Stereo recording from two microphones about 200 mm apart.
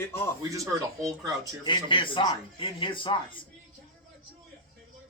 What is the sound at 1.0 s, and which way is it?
Speech, 15° right (ahead or behind).